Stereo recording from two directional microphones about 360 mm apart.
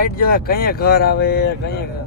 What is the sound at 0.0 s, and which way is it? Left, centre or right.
Speech, left.